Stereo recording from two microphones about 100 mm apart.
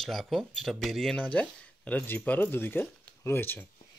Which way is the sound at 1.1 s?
15° left (ahead or behind).